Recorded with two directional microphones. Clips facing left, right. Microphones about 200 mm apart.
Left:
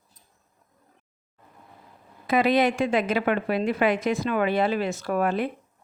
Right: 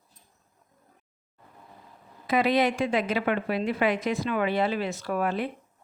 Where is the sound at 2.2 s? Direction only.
50° left (ahead or behind).